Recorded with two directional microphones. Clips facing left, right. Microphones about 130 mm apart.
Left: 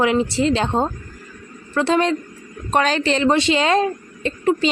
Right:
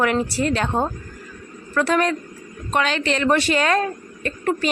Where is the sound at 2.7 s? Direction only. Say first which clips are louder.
Left 3 dB; 35° left (ahead or behind).